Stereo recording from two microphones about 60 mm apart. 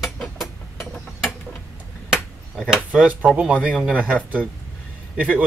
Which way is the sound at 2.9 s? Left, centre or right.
Right.